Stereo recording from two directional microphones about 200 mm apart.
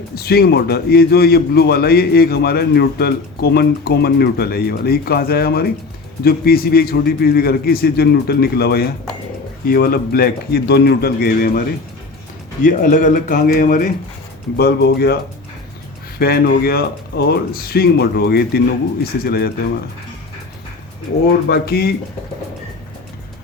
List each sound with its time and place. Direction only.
0.2 s a man's voice: 50° left (ahead or behind)
12.6 s a man's voice: 40° left (ahead or behind)
14.5 s a man's voice: 55° left (ahead or behind)
21.4 s a man's voice: 50° left (ahead or behind)